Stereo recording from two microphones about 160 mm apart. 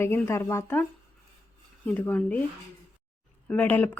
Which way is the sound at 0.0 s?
15° left (ahead or behind).